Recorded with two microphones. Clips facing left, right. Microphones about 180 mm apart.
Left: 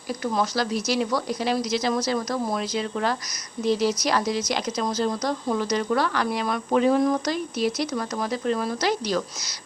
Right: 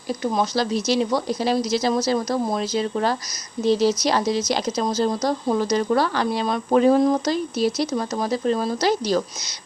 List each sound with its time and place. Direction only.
0.1 s speech: 20° right (ahead or behind)
6.7 s speech: 40° right (ahead or behind)
7.0 s speech: 30° right (ahead or behind)